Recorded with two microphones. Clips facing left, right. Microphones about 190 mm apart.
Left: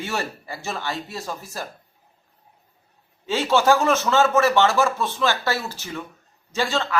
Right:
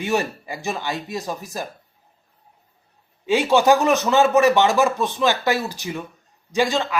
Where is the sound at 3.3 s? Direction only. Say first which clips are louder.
Right 3 dB; 15° right (ahead or behind).